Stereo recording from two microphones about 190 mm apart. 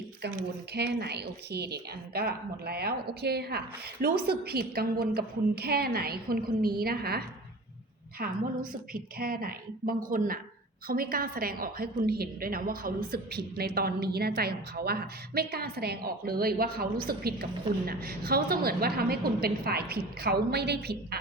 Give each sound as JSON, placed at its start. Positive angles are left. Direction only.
{"t": 0.7, "sound": "a woman's voice", "side_deg": -60}